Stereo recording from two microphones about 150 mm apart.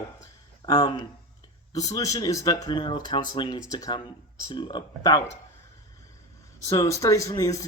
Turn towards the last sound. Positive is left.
turn(degrees=20)  # may be behind; listen again after turning